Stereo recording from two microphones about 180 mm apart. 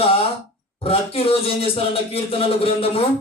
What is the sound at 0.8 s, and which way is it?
A man's voice, 30° left (ahead or behind).